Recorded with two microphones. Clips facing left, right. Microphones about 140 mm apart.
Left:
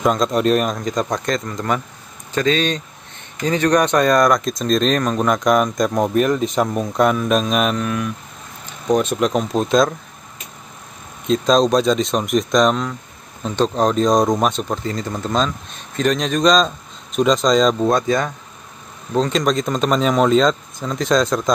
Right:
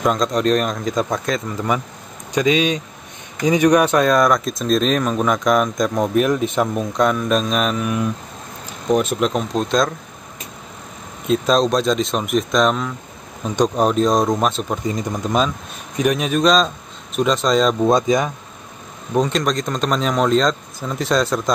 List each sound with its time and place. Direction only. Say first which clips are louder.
0.0 s speech: left 1 dB; centre (ahead or behind)
8.8 s speech: even; centre (ahead or behind)
11.2 s speech: left 1 dB; 5° right (ahead or behind)
14.8 s speech: right 1 dB; 15° right (ahead or behind)
17.8 s speech: right 1 dB; 20° right (ahead or behind)
19.2 s speech: left 2 dB; centre (ahead or behind)